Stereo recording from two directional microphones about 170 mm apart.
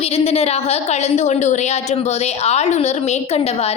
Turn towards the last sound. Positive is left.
turn(degrees=40)  # may be behind; listen again after turning